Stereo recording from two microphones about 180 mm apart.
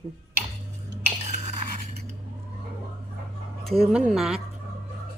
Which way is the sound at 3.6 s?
Centre (ahead or behind).